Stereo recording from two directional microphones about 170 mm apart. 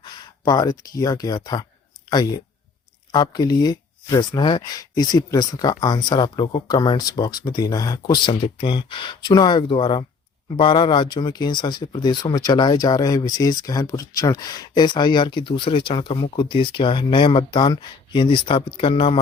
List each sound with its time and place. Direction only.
0.0 s speech: 25° left (ahead or behind)
3.1 s speech: 25° left (ahead or behind)
8.3 s speech: 30° left (ahead or behind)